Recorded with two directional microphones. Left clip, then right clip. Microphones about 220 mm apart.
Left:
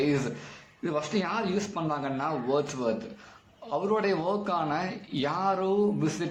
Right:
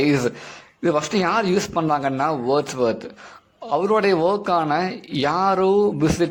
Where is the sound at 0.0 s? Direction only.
45° right (ahead or behind).